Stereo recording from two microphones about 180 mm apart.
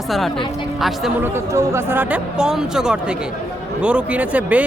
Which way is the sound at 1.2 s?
15° right (ahead or behind).